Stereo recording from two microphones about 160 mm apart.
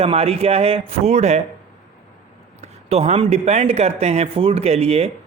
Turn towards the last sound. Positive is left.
turn(degrees=-40)  # may be behind; listen again after turning